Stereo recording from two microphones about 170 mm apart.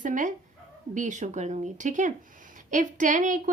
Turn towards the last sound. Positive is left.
turn(degrees=-45)  # may be behind; listen again after turning